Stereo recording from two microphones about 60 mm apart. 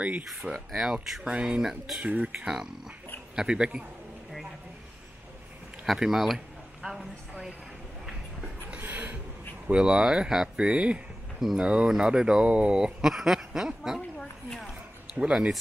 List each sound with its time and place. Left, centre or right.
0.3 s speech: centre
1.3 s speech: centre
1.6 s speech: centre
2.0 s speech: right
5.9 s a sound: centre
8.6 s a sound: right
9.7 s speech: centre
14.1 s speech: centre
14.7 s a sound: centre